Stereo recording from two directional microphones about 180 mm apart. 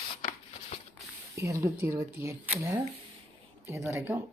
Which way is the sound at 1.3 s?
15° right (ahead or behind).